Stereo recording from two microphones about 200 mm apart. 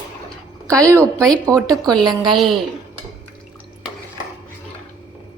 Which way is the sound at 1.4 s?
15° right (ahead or behind).